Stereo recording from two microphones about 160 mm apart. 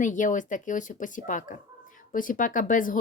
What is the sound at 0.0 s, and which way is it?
A woman's voice, 55° left (ahead or behind).